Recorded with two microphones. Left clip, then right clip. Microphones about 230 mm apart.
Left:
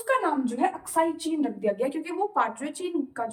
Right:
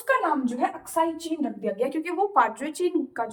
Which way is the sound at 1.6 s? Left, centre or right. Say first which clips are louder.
Even; centre.